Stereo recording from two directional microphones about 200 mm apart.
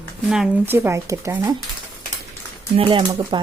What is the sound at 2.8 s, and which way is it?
Speech, 25° right (ahead or behind).